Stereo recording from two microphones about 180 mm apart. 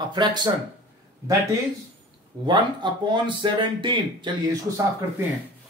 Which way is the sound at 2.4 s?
25° right (ahead or behind).